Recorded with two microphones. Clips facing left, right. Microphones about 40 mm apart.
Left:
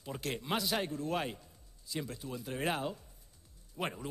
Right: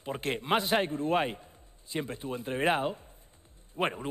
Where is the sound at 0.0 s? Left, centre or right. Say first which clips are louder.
Right 6 dB; right.